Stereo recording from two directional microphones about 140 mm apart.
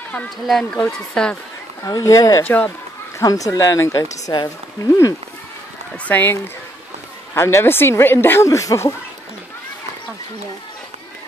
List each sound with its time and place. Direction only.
0.1 s speech: 5° left (ahead or behind)
1.8 s speech: 25° left (ahead or behind)
2.4 s speech: 10° left (ahead or behind)
3.2 s speech: 25° left (ahead or behind)
6.0 s speech: 15° left (ahead or behind)